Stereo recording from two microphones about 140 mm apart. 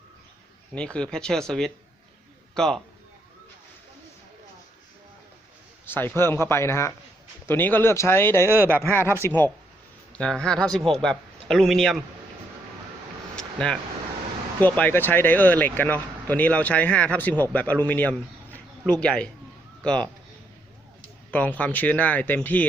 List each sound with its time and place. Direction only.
0.7 s a man's voice: 5° left (ahead or behind)
5.8 s speech: 15° left (ahead or behind)
8.4 s speech: 15° right (ahead or behind)
8.8 s a man's voice: 15° left (ahead or behind)
13.3 s vehicle: 5° left (ahead or behind)
14.6 s speech: 15° left (ahead or behind)
21.2 s speech: 10° left (ahead or behind)